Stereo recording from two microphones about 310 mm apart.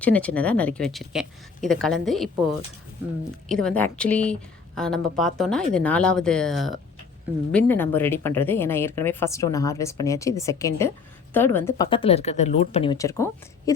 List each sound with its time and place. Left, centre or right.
0.0 s speech: centre
3.5 s a woman's voice: centre